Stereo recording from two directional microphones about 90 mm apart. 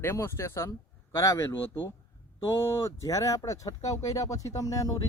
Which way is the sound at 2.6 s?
35° left (ahead or behind).